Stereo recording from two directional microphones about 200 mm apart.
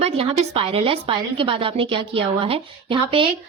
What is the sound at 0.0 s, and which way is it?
A woman's voice, 30° right (ahead or behind).